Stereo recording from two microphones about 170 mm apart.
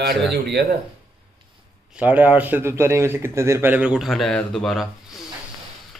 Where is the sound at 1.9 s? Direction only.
5° right (ahead or behind).